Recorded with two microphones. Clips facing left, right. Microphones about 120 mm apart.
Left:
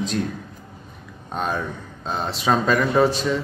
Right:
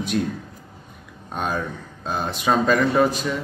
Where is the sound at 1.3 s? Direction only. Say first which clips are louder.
Even; 5° right (ahead or behind).